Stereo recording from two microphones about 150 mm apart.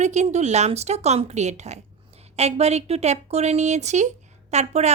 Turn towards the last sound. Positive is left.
turn(degrees=-50)  # may be behind; listen again after turning